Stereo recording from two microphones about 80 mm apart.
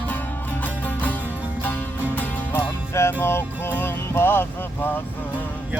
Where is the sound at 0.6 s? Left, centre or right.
Left.